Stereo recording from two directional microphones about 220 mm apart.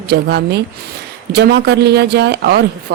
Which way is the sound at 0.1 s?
50° right (ahead or behind).